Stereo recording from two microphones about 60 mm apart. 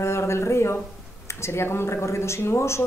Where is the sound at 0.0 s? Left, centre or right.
Left.